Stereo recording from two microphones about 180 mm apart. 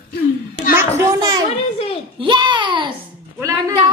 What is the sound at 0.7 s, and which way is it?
A woman's voice, 15° right (ahead or behind).